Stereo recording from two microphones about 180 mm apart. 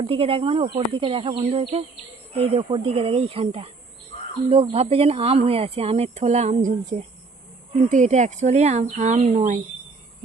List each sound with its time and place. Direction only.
0.0 s speech: 30° right (ahead or behind)